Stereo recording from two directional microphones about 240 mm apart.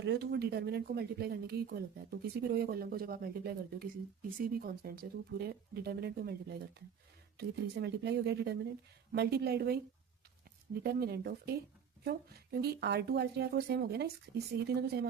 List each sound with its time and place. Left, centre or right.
0.0 s speech: right
10.8 s speech: right